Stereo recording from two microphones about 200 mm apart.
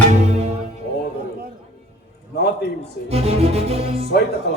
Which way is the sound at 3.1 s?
30° right (ahead or behind).